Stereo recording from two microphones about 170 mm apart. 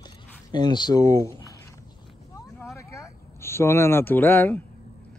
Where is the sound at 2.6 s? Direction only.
15° left (ahead or behind).